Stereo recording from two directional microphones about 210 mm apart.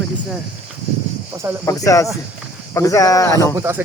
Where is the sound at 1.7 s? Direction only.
15° left (ahead or behind).